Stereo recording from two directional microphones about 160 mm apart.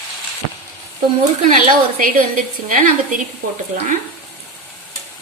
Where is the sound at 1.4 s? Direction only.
55° right (ahead or behind).